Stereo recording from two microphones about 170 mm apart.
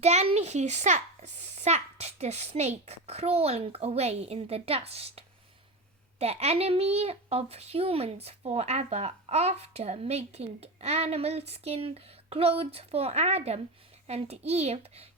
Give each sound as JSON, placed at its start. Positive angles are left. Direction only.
{"t": 0.0, "sound": "a child's voice", "side_deg": -40}